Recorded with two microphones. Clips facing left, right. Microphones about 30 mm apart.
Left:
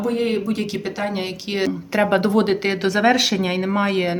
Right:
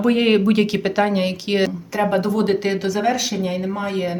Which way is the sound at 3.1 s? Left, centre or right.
Left.